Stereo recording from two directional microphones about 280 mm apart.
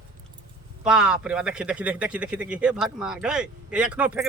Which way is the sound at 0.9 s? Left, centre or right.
Centre.